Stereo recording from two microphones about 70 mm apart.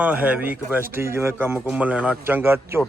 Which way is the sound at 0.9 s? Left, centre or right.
Right.